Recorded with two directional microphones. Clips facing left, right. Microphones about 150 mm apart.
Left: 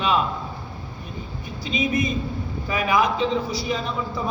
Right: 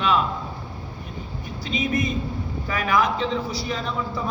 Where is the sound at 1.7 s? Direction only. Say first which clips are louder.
Left 1 dB; 20° left (ahead or behind).